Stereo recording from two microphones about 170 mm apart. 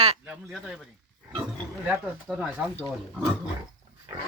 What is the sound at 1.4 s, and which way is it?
Pig, 10° right (ahead or behind).